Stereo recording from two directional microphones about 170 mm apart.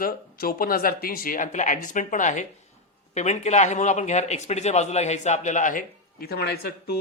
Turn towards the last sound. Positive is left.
turn(degrees=65)  # may be behind; listen again after turning